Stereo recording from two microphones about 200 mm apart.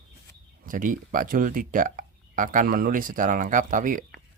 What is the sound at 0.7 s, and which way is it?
Speech, 40° right (ahead or behind).